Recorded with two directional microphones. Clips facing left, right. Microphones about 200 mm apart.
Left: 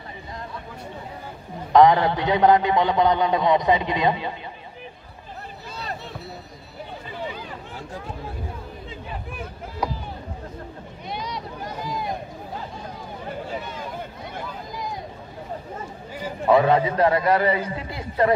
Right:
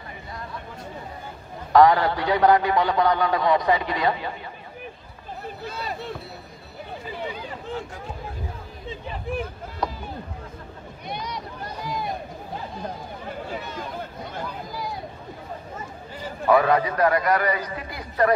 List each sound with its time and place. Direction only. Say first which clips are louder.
1.7 s a man's voice: left 1 dB; 20° left (ahead or behind)
9.8 s speech: left 1 dB; 10° left (ahead or behind)
16.4 s a man's voice: left 1 dB; 25° left (ahead or behind)